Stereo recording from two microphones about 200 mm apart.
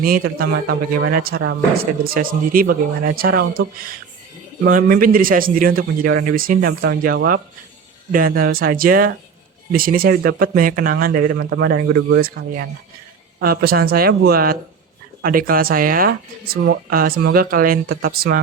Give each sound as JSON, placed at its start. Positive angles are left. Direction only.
{"t": 0.0, "sound": "a man's voice", "side_deg": -50}
{"t": 13.4, "sound": "a man's voice", "side_deg": -50}